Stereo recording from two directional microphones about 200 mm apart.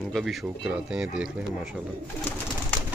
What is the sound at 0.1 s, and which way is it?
Speech, centre (ahead or behind).